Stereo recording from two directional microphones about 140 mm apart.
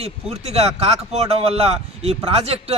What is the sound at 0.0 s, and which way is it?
Speech, 45° right (ahead or behind).